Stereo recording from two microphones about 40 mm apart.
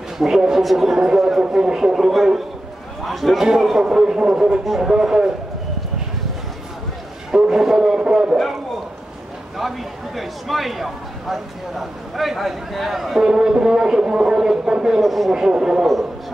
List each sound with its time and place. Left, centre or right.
0.2 s a man's voice: centre
3.3 s speech: centre
7.2 s speech: centre
9.6 s a man's voice: centre
13.2 s speech: centre
15.0 s a man's voice: centre
15.3 s speech: centre